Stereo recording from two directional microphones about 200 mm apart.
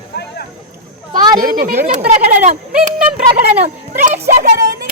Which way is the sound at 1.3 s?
45° right (ahead or behind).